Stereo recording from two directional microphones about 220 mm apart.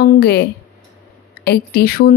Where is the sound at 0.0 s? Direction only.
45° left (ahead or behind).